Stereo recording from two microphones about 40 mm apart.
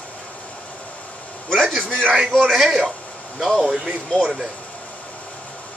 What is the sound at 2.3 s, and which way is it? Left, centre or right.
Speech, centre.